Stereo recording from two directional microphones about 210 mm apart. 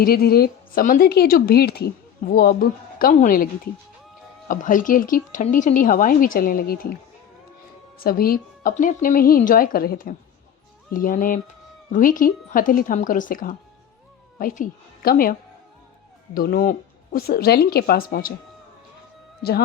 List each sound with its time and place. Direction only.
0.0 s a woman's voice: 45° left (ahead or behind)
8.0 s a woman's voice: 45° left (ahead or behind)
19.4 s speech: 50° left (ahead or behind)